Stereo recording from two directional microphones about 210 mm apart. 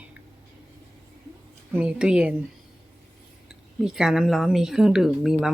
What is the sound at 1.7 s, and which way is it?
Speech, 5° right (ahead or behind).